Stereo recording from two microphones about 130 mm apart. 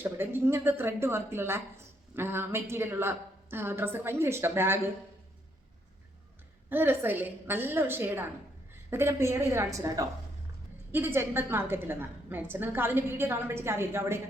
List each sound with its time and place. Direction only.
0.0 s a woman's voice: 15° right (ahead or behind)
6.7 s a woman's voice: 15° right (ahead or behind)